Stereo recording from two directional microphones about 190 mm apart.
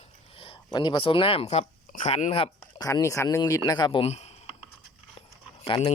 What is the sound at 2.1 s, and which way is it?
Speech, 30° left (ahead or behind).